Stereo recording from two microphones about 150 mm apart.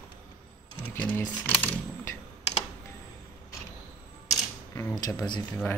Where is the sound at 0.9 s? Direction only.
10° left (ahead or behind).